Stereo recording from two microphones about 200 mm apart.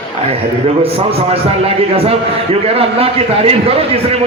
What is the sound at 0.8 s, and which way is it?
A man's voice, 30° right (ahead or behind).